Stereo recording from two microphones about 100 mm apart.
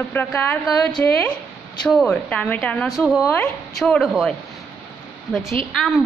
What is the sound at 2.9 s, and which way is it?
A woman's voice, centre (ahead or behind).